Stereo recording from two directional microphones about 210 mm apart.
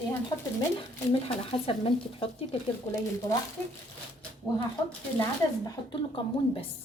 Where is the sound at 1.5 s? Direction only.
25° left (ahead or behind).